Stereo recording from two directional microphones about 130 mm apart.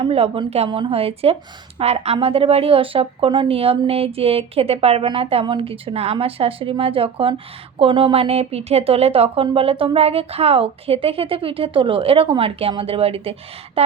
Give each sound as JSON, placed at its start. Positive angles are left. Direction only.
{"t": 0.0, "sound": "speech", "side_deg": -45}